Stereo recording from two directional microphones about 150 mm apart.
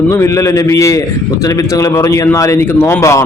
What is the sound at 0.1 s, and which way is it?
A man's voice, 20° left (ahead or behind).